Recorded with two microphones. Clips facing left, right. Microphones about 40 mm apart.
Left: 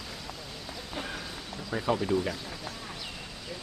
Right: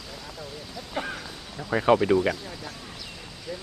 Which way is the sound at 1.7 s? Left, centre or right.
Right.